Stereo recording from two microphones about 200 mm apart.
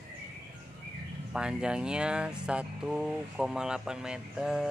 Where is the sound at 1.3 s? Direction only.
5° right (ahead or behind).